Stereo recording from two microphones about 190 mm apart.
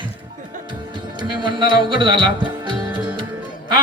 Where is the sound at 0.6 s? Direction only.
25° right (ahead or behind).